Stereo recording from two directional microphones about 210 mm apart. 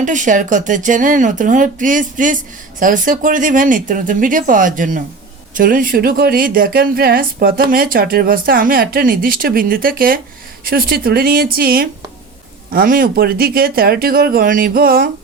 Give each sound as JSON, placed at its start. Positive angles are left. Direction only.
{"t": 0.0, "sound": "a woman's voice", "side_deg": -35}